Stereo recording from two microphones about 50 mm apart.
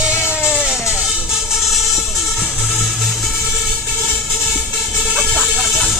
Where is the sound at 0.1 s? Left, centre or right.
Left.